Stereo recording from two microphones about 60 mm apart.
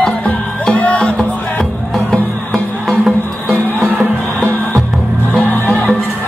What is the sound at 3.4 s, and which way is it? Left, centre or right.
Music, right.